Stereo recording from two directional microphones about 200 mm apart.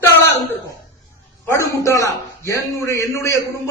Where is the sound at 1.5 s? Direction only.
15° left (ahead or behind).